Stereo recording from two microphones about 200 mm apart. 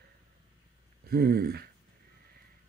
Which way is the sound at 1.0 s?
50° right (ahead or behind).